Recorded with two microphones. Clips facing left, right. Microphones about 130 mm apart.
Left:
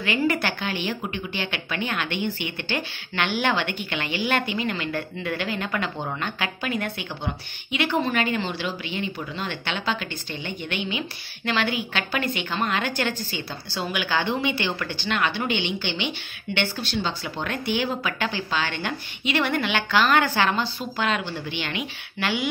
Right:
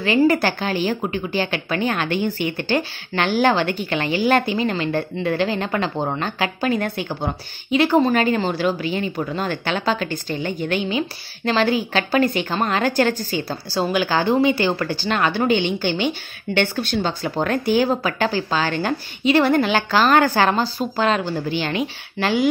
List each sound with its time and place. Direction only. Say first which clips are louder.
0.0 s a woman's voice: right 7 dB; 35° right (ahead or behind)